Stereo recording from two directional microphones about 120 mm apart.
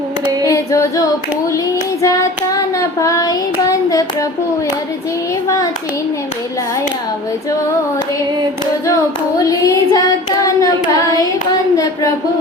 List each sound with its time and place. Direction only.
0.5 s singing: 25° left (ahead or behind)
2.0 s child singing: 25° left (ahead or behind)
9.4 s child singing: 25° left (ahead or behind)